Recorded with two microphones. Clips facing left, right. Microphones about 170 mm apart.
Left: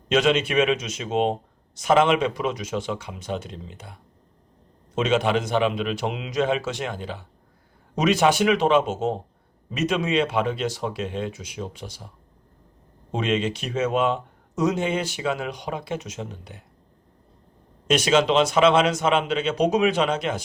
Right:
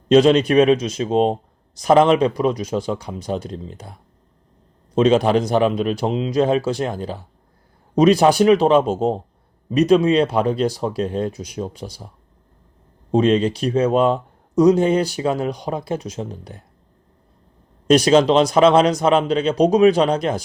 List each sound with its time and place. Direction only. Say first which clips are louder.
0.1 s speech: right 8 dB; 35° right (ahead or behind)
4.9 s speech: right 7 dB; 35° right (ahead or behind)
13.1 s speech: right 8 dB; 35° right (ahead or behind)
17.8 s speech: right 6 dB; 35° right (ahead or behind)